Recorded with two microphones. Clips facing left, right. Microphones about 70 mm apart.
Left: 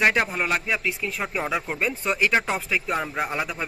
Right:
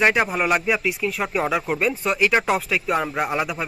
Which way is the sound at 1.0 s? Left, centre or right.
Centre.